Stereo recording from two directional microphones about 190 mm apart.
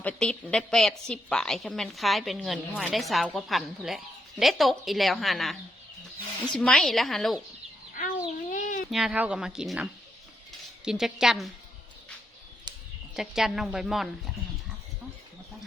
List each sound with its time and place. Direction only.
0.0 s a woman's voice: 5° left (ahead or behind)
8.4 s a sound: 40° left (ahead or behind)
8.9 s a woman's voice: centre (ahead or behind)
13.1 s a woman's voice: centre (ahead or behind)